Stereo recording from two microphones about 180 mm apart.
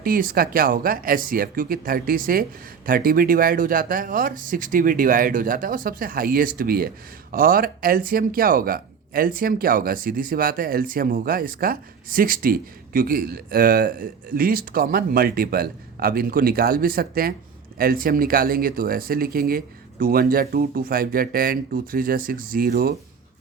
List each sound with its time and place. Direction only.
0.0 s speech: 55° right (ahead or behind)